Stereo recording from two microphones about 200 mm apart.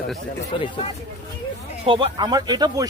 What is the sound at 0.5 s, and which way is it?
Speech, 25° left (ahead or behind).